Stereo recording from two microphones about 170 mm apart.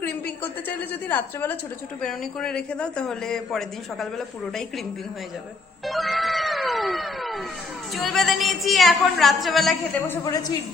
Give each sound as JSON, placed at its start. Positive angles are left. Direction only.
{"t": 0.0, "sound": "a woman's voice", "side_deg": 10}
{"t": 5.8, "sound": "cat", "side_deg": 0}
{"t": 7.9, "sound": "a woman's voice", "side_deg": 0}
{"t": 10.1, "sound": "a woman's voice", "side_deg": 20}